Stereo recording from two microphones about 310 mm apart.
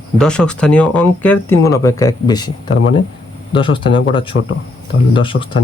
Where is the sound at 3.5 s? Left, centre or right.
Centre.